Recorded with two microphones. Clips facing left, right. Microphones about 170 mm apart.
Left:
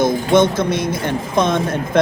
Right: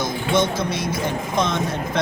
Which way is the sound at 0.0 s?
55° left (ahead or behind).